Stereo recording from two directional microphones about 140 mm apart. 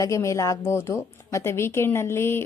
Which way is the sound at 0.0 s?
20° left (ahead or behind).